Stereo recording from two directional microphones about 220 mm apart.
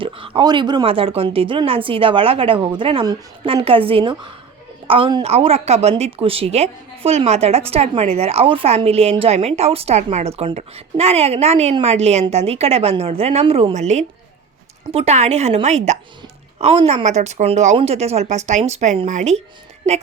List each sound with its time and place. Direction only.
0.0 s a woman's voice: 20° right (ahead or behind)